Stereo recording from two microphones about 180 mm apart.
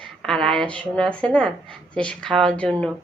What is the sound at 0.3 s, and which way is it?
A woman's voice, 5° left (ahead or behind).